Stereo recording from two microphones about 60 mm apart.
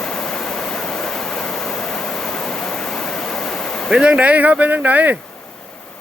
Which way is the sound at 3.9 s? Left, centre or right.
Centre.